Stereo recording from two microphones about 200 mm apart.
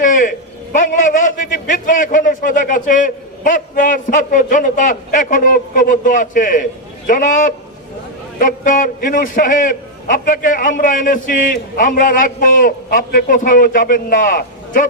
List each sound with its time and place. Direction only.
0.0 s a man's voice: 40° left (ahead or behind)